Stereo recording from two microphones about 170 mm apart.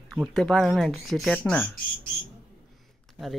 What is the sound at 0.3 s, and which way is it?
Speech, centre (ahead or behind).